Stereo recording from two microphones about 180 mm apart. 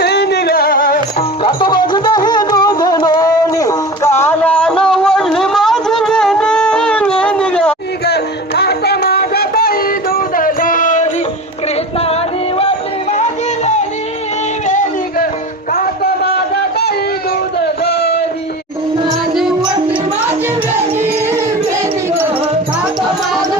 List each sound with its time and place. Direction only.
0.0 s music: 65° left (ahead or behind)
1.5 s music: 25° left (ahead or behind); by 7.8 s 5° left (ahead or behind)
8.0 s music: 65° left (ahead or behind); by 11.1 s 45° left (ahead or behind)
12.5 s music: 35° left (ahead or behind)
14.7 s a sound: 45° left (ahead or behind)
15.7 s a sound: 55° left (ahead or behind)
19.0 s music: centre (ahead or behind)